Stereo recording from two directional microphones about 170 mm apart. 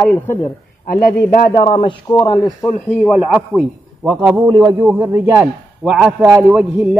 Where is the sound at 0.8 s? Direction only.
55° left (ahead or behind).